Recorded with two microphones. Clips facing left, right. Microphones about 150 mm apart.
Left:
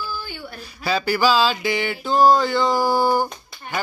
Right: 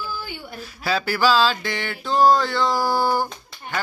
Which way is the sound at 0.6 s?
Centre (ahead or behind).